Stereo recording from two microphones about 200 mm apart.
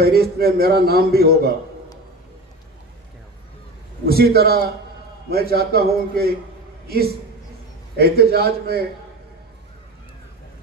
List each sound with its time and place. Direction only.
0.0 s a man's voice: 50° right (ahead or behind)
4.0 s a man's voice: 50° right (ahead or behind)
8.0 s a man's voice: 55° right (ahead or behind)